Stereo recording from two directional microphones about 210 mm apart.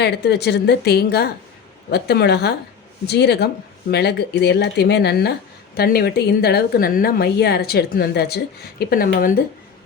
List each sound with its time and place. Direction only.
0.0 s speech: 50° left (ahead or behind)